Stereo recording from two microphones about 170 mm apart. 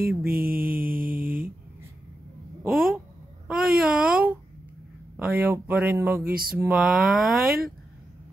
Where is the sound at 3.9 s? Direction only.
5° right (ahead or behind).